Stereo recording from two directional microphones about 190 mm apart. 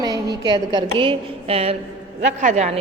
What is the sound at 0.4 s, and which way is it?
A woman's voice, 25° right (ahead or behind).